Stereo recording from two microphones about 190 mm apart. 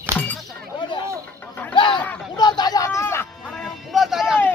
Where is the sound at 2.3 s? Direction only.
20° left (ahead or behind).